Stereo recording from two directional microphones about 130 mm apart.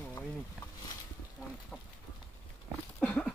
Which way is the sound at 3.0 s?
10° left (ahead or behind).